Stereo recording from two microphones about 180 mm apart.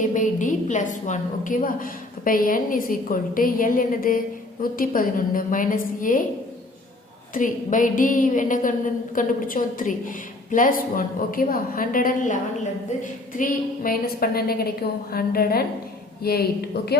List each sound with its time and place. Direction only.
0.1 s a woman's voice: 45° left (ahead or behind)
7.3 s a woman's voice: 45° left (ahead or behind); by 17.0 s 65° left (ahead or behind)